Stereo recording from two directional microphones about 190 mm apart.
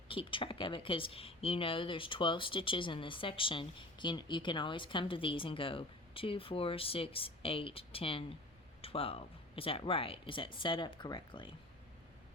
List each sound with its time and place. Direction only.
0.1 s speech: 25° left (ahead or behind)